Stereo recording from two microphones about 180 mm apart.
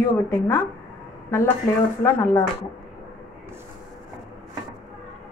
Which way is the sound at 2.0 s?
15° left (ahead or behind).